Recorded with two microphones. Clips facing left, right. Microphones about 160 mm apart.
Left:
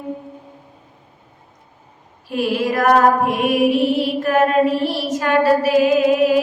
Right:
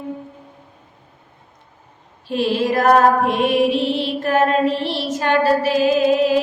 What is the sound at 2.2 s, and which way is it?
Music, 25° right (ahead or behind).